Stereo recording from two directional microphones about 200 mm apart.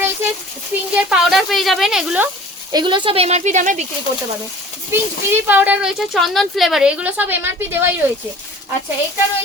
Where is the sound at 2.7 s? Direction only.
20° right (ahead or behind); by 3.9 s 40° right (ahead or behind).